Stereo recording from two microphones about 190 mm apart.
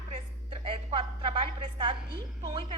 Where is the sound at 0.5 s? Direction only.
30° right (ahead or behind).